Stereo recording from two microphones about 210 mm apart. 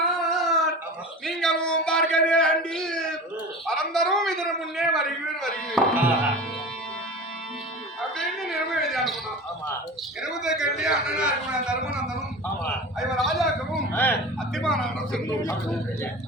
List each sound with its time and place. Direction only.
0.2 s a sound: centre (ahead or behind)
3.7 s a man's voice: centre (ahead or behind)
8.4 s a man's voice: centre (ahead or behind)
10.2 s a man's voice: centre (ahead or behind)
13.1 s a man's voice: centre (ahead or behind)
15.3 s a man's voice: 15° left (ahead or behind)